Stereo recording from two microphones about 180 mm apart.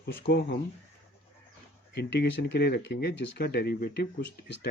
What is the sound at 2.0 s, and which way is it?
Speech, 75° left (ahead or behind).